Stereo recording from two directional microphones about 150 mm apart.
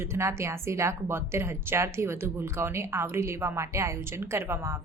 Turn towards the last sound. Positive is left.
turn(degrees=-15)  # may be behind; listen again after turning